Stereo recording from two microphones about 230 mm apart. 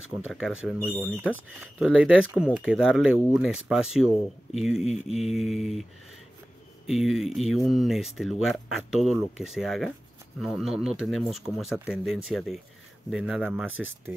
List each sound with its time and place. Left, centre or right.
0.1 s speech: centre
6.9 s speech: centre